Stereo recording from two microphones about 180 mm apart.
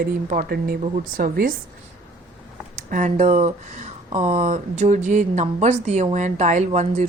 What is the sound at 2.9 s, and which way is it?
A woman's voice, 45° right (ahead or behind).